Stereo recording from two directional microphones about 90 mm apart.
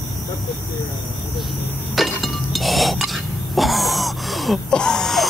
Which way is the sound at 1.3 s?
Centre (ahead or behind).